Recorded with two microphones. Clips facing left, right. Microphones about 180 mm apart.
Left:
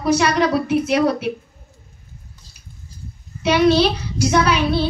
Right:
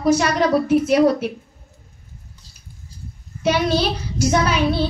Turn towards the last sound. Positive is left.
turn(degrees=-45)  # may be behind; listen again after turning